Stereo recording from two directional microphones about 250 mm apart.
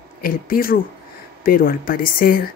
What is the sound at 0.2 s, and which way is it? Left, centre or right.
A woman's voice, left.